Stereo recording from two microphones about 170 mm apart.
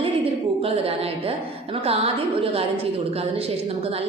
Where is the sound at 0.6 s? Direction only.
35° right (ahead or behind).